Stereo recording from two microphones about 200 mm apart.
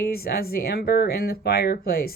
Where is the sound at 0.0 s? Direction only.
50° left (ahead or behind).